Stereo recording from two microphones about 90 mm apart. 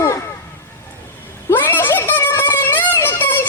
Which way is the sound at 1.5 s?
20° left (ahead or behind).